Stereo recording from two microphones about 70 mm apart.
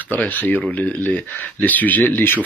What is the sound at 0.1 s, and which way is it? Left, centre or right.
Speech, left.